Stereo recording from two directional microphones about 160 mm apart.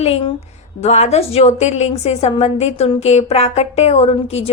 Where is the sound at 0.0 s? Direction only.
35° left (ahead or behind).